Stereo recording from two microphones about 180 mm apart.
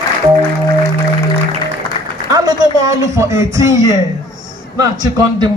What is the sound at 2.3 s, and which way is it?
A man's voice, 20° right (ahead or behind).